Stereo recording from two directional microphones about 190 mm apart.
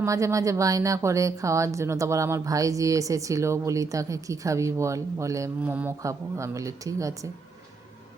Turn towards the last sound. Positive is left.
turn(degrees=-15)  # may be behind; listen again after turning